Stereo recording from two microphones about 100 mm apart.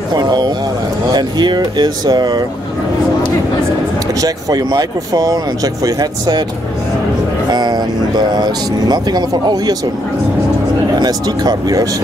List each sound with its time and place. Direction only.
0.1 s speech: 45° right (ahead or behind)
4.2 s speech: 40° right (ahead or behind)
7.5 s vehicle: 45° right (ahead or behind)
8.3 s speech: 45° right (ahead or behind)
11.0 s speech: 40° right (ahead or behind)